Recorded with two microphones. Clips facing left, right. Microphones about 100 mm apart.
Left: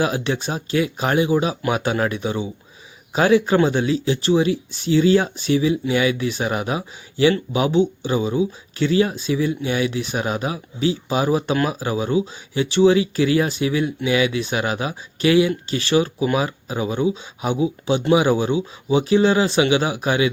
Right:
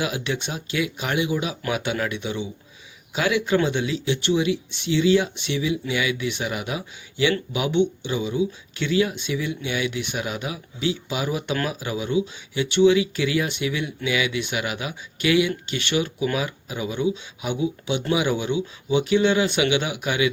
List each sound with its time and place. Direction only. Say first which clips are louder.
0.0 s speech: left 5 dB; 35° left (ahead or behind)